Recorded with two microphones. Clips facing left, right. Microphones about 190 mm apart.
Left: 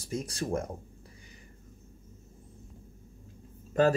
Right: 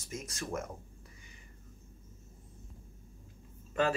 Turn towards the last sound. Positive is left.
turn(degrees=40)  # may be behind; listen again after turning